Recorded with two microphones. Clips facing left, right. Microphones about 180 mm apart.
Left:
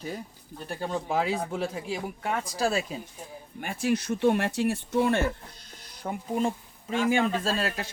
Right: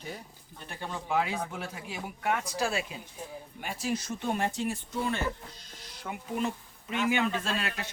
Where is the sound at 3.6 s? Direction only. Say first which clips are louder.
Left 6 dB; 55° left (ahead or behind).